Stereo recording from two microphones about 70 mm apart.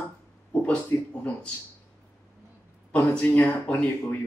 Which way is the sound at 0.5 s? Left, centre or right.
Centre.